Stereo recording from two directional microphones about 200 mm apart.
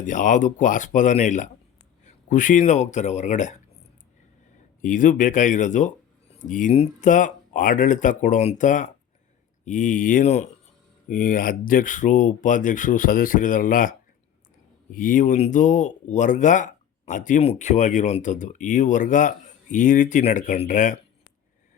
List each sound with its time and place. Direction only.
0.0 s speech: 40° left (ahead or behind)
4.8 s speech: 40° left (ahead or behind)
14.9 s speech: 40° left (ahead or behind)